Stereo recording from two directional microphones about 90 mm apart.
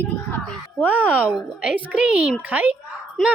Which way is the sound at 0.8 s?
15° right (ahead or behind).